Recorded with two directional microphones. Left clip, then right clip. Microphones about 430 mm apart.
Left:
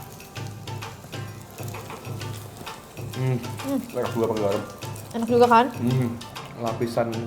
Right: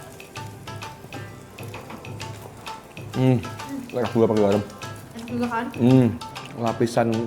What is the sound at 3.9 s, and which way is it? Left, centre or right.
Speech, right.